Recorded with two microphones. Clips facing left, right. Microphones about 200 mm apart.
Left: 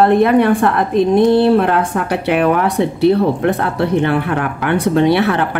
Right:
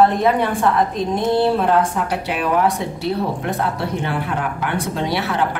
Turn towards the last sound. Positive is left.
turn(degrees=60)  # may be behind; listen again after turning